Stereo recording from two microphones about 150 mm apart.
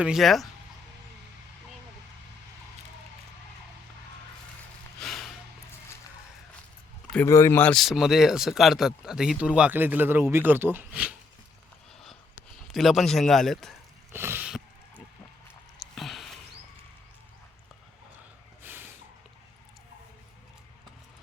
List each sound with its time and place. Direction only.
0.0 s a man's voice: centre (ahead or behind)
4.9 s gasp: centre (ahead or behind)
7.3 s speech: 20° left (ahead or behind)
7.8 s speech: centre (ahead or behind)
12.7 s a man's voice: centre (ahead or behind)
14.1 s a sound: 15° right (ahead or behind)
15.8 s a sound: centre (ahead or behind)
18.6 s snort: 15° right (ahead or behind)